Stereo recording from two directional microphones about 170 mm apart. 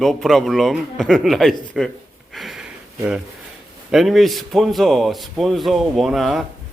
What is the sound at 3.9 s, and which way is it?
A man's voice, centre (ahead or behind).